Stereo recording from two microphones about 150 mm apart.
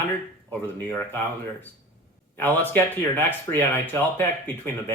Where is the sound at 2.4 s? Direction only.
10° left (ahead or behind).